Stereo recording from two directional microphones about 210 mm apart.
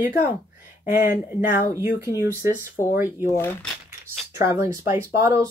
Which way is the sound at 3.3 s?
10° left (ahead or behind).